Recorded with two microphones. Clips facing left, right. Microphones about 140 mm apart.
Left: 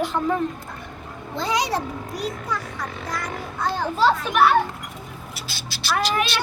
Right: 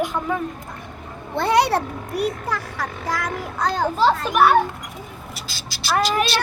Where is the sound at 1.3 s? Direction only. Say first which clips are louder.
Right 6 dB; 60° right (ahead or behind); by 3.7 s 90° right.